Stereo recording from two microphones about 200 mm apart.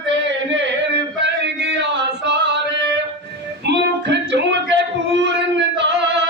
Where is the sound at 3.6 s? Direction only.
60° right (ahead or behind).